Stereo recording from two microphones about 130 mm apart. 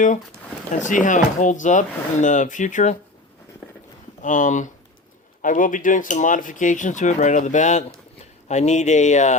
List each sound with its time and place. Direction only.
0.7 s speech: 70° left (ahead or behind)
4.2 s speech: 75° left (ahead or behind)
5.4 s speech: 90° left; by 9.4 s 65° left (ahead or behind)